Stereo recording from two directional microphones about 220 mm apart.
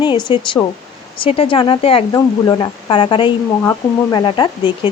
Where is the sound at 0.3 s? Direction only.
20° left (ahead or behind).